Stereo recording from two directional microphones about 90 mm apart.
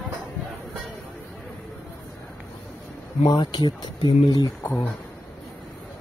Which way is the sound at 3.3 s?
50° left (ahead or behind).